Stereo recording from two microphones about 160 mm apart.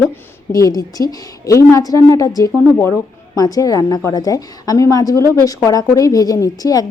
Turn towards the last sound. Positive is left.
turn(degrees=20)  # may be behind; listen again after turning